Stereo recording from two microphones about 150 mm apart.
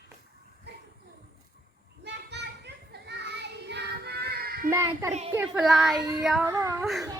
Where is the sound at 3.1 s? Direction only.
90° right.